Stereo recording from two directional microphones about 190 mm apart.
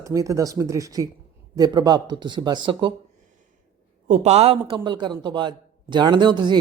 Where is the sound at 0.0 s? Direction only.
15° right (ahead or behind).